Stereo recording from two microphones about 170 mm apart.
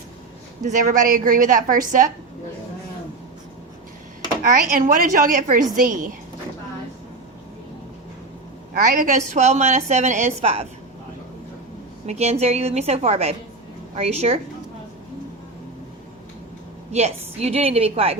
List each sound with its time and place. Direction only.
0.6 s a woman's voice: 50° right (ahead or behind)
4.4 s a woman's voice: 50° right (ahead or behind)
8.8 s a woman's voice: 50° right (ahead or behind)
12.0 s a woman's voice: 40° right (ahead or behind)
16.9 s a woman's voice: 40° right (ahead or behind)